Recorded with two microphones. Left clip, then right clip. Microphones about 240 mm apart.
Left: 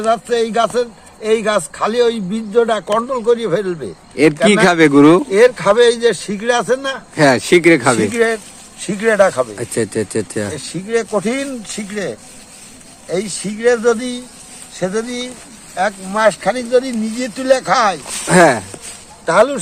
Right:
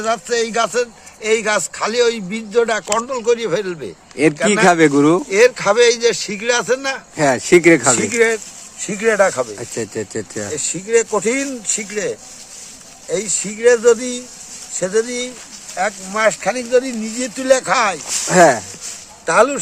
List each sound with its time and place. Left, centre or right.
0.0 s a man's voice: centre
4.6 s a man's voice: centre
5.3 s speech: centre
7.2 s a man's voice: centre
8.1 s speech: right
9.6 s a man's voice: centre
10.5 s speech: right
15.7 s speech: right
18.3 s a man's voice: centre
19.2 s speech: centre